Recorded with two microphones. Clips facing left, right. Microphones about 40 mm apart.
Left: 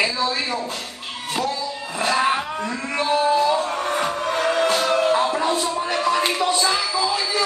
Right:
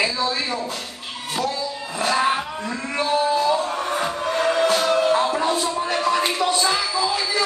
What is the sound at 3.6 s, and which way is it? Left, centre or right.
Music, centre.